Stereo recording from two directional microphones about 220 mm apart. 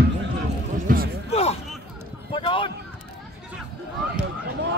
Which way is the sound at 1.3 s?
30° left (ahead or behind).